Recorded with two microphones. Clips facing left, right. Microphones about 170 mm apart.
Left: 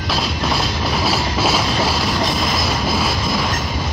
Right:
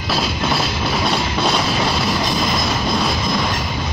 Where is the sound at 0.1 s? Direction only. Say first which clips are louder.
Right 1 dB; centre (ahead or behind).